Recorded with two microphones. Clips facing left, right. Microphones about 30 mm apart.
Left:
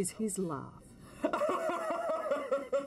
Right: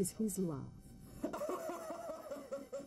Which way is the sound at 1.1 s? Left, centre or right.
Left.